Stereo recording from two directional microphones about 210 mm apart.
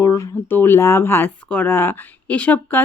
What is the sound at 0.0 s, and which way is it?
Speech, 15° left (ahead or behind).